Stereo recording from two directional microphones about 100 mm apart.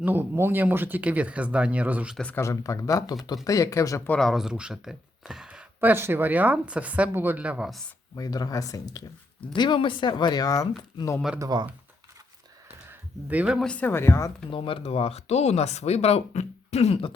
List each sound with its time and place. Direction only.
0.0 s speech: 20° right (ahead or behind)
2.3 s speech: 30° left (ahead or behind)
4.2 s speech: centre (ahead or behind)
5.9 s speech: 20° right (ahead or behind)
8.1 s speech: 40° left (ahead or behind)
9.6 s speech: 55° left (ahead or behind); by 11.2 s 35° left (ahead or behind)
11.3 s speech: 40° right (ahead or behind)
12.9 s speech: 15° right (ahead or behind)
13.6 s speech: 10° left (ahead or behind); by 14.3 s 30° left (ahead or behind)
14.5 s speech: 60° left (ahead or behind)